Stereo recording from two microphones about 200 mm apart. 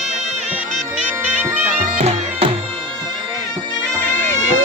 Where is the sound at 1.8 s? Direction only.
35° right (ahead or behind).